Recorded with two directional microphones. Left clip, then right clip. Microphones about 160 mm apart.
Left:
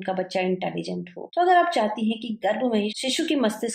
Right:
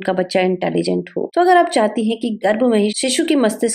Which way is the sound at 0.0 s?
45° right (ahead or behind).